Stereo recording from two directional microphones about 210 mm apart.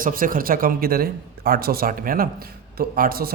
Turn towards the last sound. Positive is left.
turn(degrees=-45)  # may be behind; listen again after turning